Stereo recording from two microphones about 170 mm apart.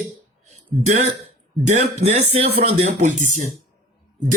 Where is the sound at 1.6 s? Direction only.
45° right (ahead or behind).